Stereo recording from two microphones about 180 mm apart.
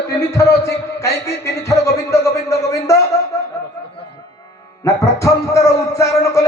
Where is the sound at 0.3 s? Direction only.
15° left (ahead or behind).